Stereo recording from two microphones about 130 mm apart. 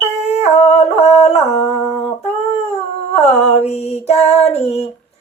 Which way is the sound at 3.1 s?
55° left (ahead or behind).